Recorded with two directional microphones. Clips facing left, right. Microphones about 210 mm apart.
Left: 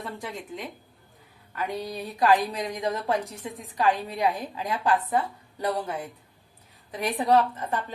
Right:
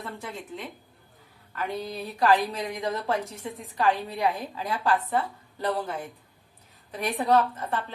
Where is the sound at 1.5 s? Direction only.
15° left (ahead or behind).